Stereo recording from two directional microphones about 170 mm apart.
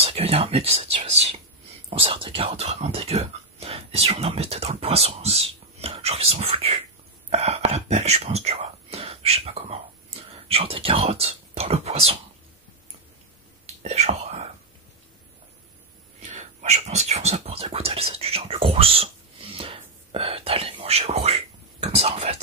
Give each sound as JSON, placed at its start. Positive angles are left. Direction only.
{"t": 0.0, "sound": "speech", "side_deg": -35}
{"t": 13.8, "sound": "speech", "side_deg": -40}
{"t": 16.2, "sound": "speech", "side_deg": -45}